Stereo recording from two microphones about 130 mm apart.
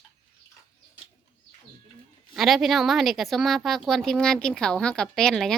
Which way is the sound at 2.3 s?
Centre (ahead or behind).